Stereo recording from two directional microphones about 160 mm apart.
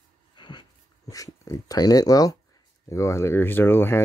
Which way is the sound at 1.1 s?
20° left (ahead or behind).